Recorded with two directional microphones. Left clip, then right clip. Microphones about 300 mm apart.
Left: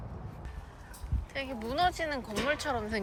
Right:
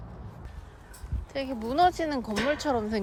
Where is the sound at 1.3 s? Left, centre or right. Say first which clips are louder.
Right 4 dB; centre.